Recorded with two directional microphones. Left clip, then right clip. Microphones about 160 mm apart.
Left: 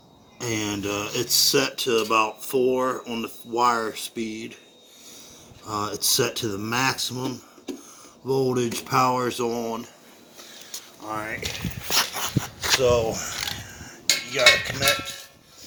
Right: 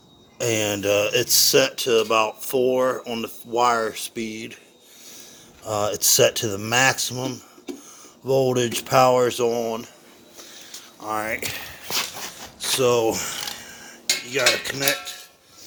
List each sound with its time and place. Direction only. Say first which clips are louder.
0.3 s speech: right 5 dB; 90° right
5.6 s speech: right 4 dB; 85° right
8.4 s speech: right 3 dB; 90° right
11.0 s speech: right 5 dB; 90° right
11.9 s a sound: left 3 dB; centre (ahead or behind)
12.8 s a sound: right 4 dB; 55° right (ahead or behind)
14.3 s mechanisms: left 3 dB; 55° right (ahead or behind)